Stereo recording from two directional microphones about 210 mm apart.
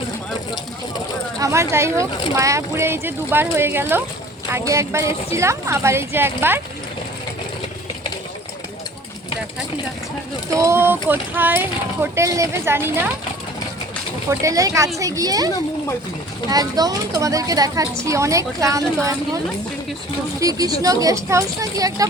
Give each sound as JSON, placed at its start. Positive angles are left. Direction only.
{"t": 1.4, "sound": "speech", "side_deg": -15}
{"t": 10.6, "sound": "speech", "side_deg": -10}
{"t": 14.3, "sound": "speech", "side_deg": -15}
{"t": 16.5, "sound": "speech", "side_deg": -15}
{"t": 20.4, "sound": "speech", "side_deg": -15}